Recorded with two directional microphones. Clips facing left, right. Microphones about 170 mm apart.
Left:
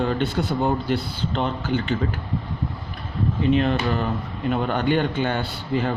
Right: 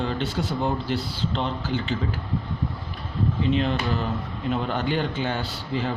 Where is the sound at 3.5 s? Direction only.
55° left (ahead or behind).